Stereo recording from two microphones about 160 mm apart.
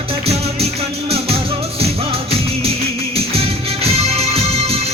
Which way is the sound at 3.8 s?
40° right (ahead or behind).